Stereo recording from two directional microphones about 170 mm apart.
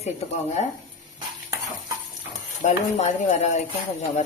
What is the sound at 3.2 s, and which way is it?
Speech, 40° left (ahead or behind).